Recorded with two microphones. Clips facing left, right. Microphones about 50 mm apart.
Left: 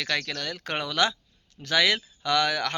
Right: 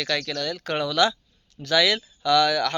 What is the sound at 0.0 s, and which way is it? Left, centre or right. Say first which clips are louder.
Speech: right 3 dB; left.